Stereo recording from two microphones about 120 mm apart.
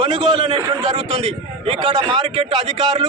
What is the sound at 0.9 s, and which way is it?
A man's voice, 55° right (ahead or behind).